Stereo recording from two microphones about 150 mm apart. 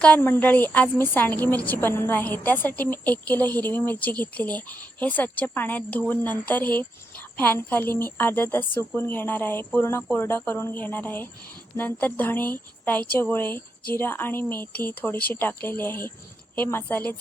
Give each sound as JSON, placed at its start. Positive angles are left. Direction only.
{"t": 0.0, "sound": "a woman's voice", "side_deg": 10}